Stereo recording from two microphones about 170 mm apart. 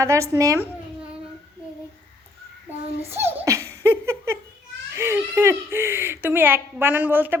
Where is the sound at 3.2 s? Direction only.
15° right (ahead or behind).